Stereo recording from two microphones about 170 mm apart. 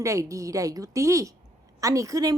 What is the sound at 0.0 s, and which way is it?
Speech, 20° right (ahead or behind).